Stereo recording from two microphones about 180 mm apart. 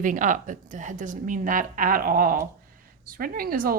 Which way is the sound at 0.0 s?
45° right (ahead or behind).